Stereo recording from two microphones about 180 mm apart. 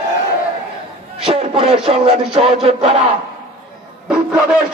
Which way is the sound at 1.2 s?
30° right (ahead or behind).